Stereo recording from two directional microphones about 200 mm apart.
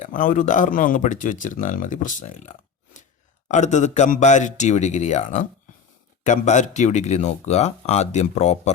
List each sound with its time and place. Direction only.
0.0 s speech: 40° left (ahead or behind)